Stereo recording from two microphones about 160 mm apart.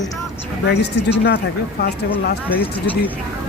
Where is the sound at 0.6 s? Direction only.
90° left.